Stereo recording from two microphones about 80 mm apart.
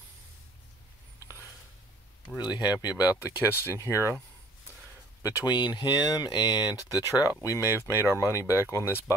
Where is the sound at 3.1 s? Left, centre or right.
Left.